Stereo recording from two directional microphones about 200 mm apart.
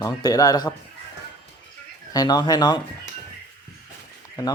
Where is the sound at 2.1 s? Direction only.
20° left (ahead or behind).